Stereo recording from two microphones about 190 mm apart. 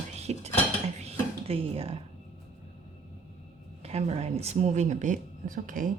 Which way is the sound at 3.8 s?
35° right (ahead or behind).